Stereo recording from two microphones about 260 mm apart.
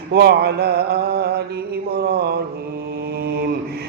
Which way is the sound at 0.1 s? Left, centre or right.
Right.